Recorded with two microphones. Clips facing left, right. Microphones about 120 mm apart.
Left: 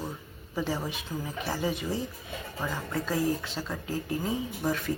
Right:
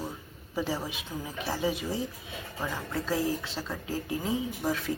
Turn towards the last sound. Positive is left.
turn(degrees=0)  # may be behind; listen again after turning